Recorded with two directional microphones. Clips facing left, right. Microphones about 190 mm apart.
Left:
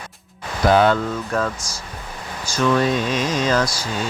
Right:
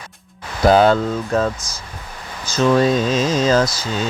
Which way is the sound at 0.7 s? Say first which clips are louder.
Right 3 dB; 35° right (ahead or behind).